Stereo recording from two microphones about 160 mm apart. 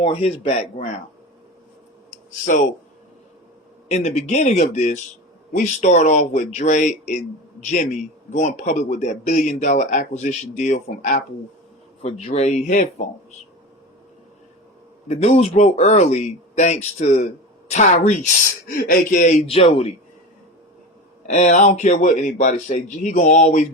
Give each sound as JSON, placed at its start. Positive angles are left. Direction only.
{"t": 0.0, "sound": "speech", "side_deg": 40}
{"t": 3.8, "sound": "speech", "side_deg": 45}
{"t": 12.0, "sound": "speech", "side_deg": 40}
{"t": 15.0, "sound": "speech", "side_deg": 45}
{"t": 18.7, "sound": "speech", "side_deg": 65}
{"t": 19.5, "sound": "speech", "side_deg": 35}
{"t": 21.2, "sound": "speech", "side_deg": 45}